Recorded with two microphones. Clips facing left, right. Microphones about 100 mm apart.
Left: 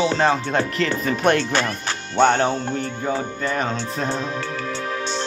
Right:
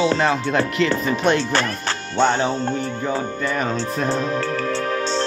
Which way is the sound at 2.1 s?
65° left (ahead or behind).